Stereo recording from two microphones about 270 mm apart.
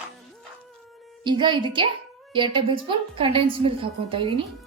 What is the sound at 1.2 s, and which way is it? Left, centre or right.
A woman's voice, centre.